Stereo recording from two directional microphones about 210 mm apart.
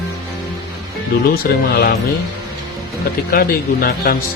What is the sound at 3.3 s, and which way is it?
Speech, 45° left (ahead or behind).